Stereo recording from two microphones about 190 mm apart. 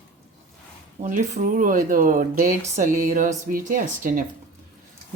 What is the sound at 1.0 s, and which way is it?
Speech, 40° right (ahead or behind).